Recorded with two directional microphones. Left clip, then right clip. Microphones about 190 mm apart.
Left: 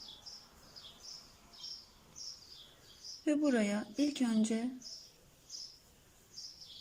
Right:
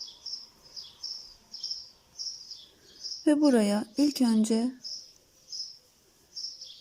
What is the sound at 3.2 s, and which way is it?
Speech, 25° right (ahead or behind).